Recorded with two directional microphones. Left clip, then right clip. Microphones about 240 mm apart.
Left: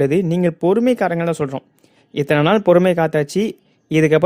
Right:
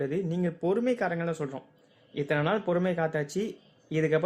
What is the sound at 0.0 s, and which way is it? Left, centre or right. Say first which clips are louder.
Speech: left 14 dB; left.